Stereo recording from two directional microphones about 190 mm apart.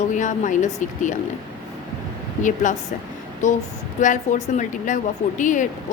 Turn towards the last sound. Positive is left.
turn(degrees=40)  # may be behind; listen again after turning